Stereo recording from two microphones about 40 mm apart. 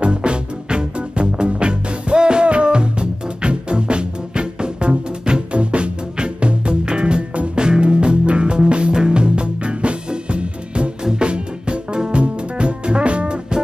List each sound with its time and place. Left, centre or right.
0.0 s music: right